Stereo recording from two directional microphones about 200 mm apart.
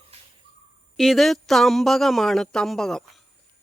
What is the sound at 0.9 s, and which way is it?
Speech, centre (ahead or behind).